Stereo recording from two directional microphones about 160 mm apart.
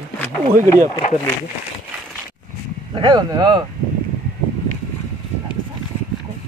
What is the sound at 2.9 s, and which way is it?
Speech, 25° right (ahead or behind).